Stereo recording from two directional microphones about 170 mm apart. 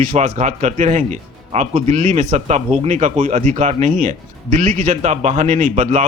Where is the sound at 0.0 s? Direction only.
45° right (ahead or behind).